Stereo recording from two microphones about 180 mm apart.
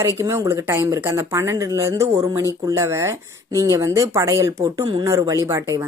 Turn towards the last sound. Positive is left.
turn(degrees=-20)  # may be behind; listen again after turning